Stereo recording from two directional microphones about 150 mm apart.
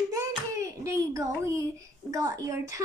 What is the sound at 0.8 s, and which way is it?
A child's voice, 20° right (ahead or behind).